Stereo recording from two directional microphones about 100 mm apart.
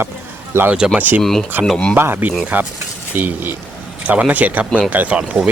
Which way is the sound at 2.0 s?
20° right (ahead or behind).